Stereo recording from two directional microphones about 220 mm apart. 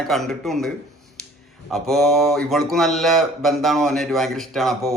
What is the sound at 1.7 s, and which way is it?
Mantra, centre (ahead or behind).